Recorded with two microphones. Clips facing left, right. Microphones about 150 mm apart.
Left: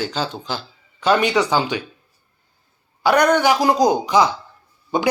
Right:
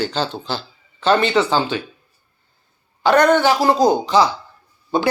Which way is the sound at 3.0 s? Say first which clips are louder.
Right 2 dB; 10° left (ahead or behind).